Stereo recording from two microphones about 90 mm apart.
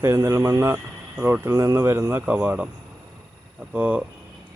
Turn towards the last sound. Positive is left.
turn(degrees=-15)  # may be behind; listen again after turning